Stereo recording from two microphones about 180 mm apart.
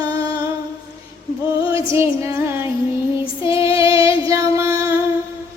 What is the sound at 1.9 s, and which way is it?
Music, 15° right (ahead or behind).